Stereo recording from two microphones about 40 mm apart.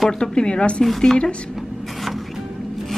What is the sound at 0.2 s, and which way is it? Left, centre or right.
Speech, left.